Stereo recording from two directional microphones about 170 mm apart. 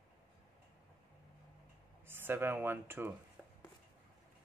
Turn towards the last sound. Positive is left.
turn(degrees=0)  # may be behind; listen again after turning